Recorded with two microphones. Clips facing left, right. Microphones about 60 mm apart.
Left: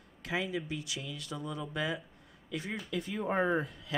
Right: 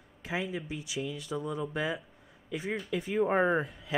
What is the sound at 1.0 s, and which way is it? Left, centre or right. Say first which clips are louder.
Speech: right 6 dB; left.